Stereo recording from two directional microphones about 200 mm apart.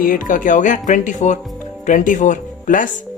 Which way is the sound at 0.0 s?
40° left (ahead or behind).